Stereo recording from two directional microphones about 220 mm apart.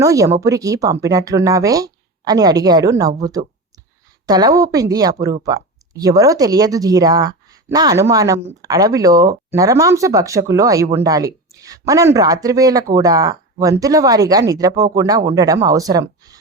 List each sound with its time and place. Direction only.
0.0 s speech: 15° right (ahead or behind)